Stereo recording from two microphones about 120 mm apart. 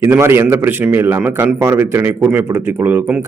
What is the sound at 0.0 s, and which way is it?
A man's voice, 20° right (ahead or behind).